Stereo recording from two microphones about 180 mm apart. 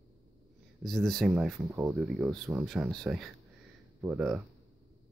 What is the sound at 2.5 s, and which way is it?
Speech, 15° right (ahead or behind).